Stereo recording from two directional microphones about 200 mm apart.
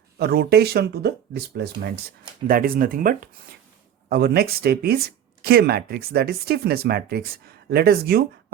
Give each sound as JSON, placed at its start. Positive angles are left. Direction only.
{"t": 0.2, "sound": "speech", "side_deg": -50}